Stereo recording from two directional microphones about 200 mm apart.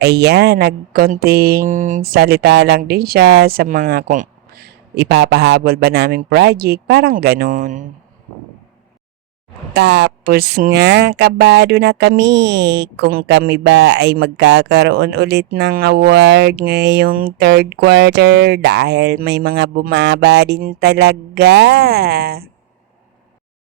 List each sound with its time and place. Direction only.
0.0 s speech: 55° right (ahead or behind)
9.7 s speech: 55° right (ahead or behind)